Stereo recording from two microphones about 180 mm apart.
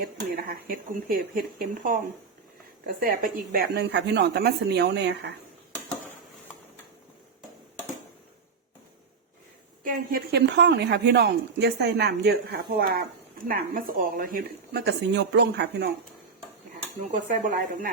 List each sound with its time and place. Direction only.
0.0 s speech: 55° right (ahead or behind); by 5.3 s 70° right (ahead or behind)
9.8 s speech: 60° right (ahead or behind)
17.1 s speech: 45° right (ahead or behind)